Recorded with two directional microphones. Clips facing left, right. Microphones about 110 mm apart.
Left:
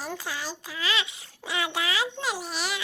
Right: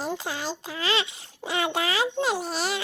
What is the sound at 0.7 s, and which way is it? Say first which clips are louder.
A child's voice: right 3 dB; 30° right (ahead or behind).